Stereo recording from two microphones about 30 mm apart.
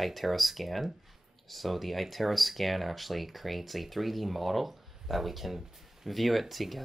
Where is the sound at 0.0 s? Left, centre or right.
Centre.